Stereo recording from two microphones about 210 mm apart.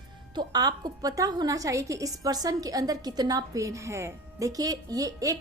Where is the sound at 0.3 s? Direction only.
20° right (ahead or behind).